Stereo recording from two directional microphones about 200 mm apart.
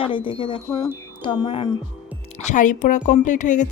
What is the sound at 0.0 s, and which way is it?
Speech, 25° left (ahead or behind).